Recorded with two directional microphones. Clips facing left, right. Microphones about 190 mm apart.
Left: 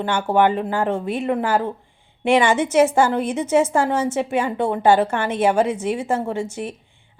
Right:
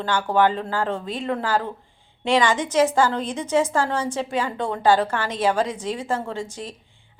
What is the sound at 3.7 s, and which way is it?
Speech, 25° left (ahead or behind).